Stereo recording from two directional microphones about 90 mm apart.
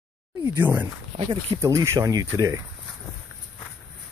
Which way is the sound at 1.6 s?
35° right (ahead or behind).